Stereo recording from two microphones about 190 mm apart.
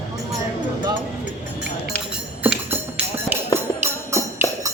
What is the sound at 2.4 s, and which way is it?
Music, 5° right (ahead or behind).